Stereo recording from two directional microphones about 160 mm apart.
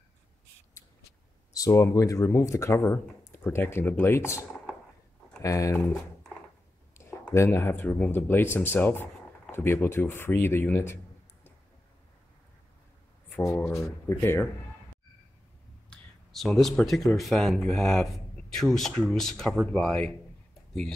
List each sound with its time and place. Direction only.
1.5 s speech: 20° left (ahead or behind)
6.9 s a sound: 15° left (ahead or behind)
7.2 s speech: 15° left (ahead or behind)
13.4 s speech: 20° left (ahead or behind)
15.9 s a sound: centre (ahead or behind)
17.2 s speech: centre (ahead or behind)